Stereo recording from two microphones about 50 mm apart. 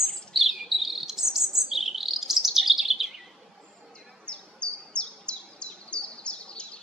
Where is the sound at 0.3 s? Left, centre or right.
Centre.